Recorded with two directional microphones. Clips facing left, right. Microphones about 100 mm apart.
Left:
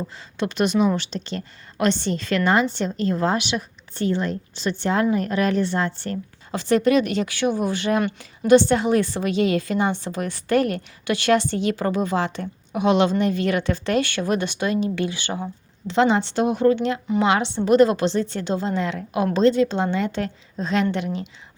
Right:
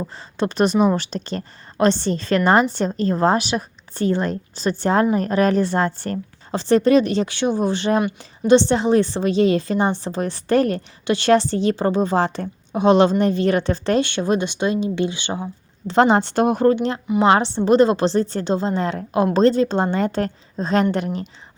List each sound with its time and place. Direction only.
0.0 s a woman's voice: 35° right (ahead or behind)
15.9 s speech: 45° right (ahead or behind)
17.2 s a woman's voice: 35° right (ahead or behind)